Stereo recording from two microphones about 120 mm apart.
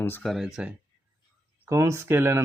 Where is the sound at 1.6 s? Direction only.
25° right (ahead or behind).